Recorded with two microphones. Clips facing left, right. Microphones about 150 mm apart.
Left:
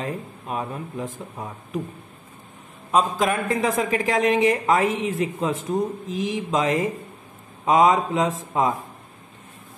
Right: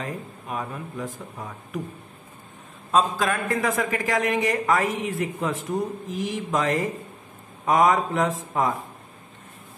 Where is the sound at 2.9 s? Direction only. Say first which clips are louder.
Left 1 dB; 15° left (ahead or behind).